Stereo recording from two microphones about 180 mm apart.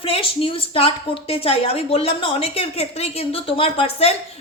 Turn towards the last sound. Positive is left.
turn(degrees=35)  # may be behind; listen again after turning